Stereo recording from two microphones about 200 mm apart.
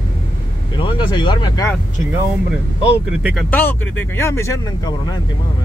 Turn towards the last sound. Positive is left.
turn(degrees=15)  # may be behind; listen again after turning